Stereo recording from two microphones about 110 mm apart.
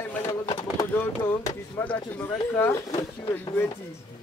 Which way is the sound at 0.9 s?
20° left (ahead or behind).